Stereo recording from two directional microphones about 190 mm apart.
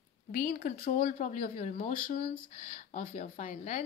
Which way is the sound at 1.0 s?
40° left (ahead or behind).